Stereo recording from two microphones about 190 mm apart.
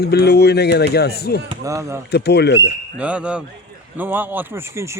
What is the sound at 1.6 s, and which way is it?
Speech, 15° right (ahead or behind).